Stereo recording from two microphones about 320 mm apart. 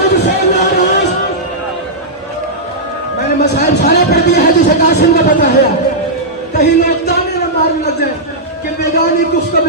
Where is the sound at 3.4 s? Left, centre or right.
Left.